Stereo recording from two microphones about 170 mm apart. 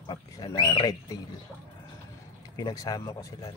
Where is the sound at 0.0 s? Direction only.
25° left (ahead or behind).